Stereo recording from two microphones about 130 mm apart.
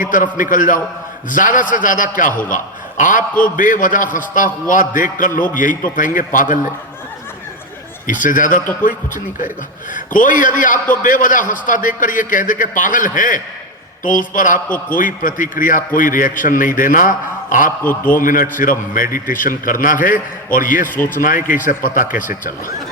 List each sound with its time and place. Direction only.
0.0 s a man's voice: 90° left
8.0 s a man's voice: 90° left
17.8 s a man's voice: 15° left (ahead or behind)
18.2 s a man's voice: 90° left